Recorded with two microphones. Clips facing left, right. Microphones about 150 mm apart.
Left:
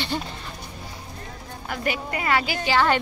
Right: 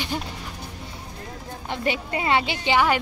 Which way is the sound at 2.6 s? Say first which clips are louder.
Even; 10° right (ahead or behind).